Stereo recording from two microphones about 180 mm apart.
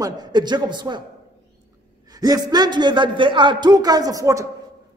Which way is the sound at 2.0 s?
20° right (ahead or behind).